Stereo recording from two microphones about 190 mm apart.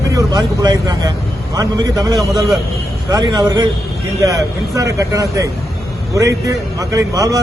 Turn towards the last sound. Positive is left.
turn(degrees=-20)  # may be behind; listen again after turning